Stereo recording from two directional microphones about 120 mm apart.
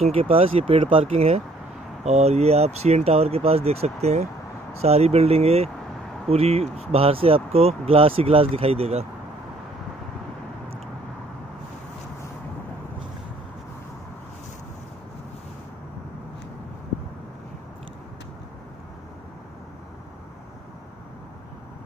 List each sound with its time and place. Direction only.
0.0 s speech: 55° right (ahead or behind)
1.0 s speech: 60° right (ahead or behind)